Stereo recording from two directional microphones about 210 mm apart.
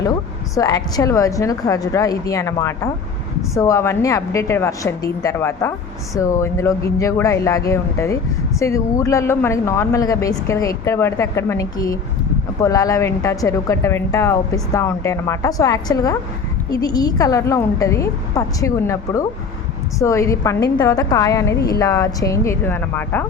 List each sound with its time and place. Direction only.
0.5 s speech: 15° left (ahead or behind)